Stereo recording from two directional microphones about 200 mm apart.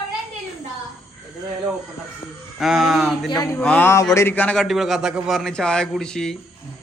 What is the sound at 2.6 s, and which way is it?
Speech, centre (ahead or behind).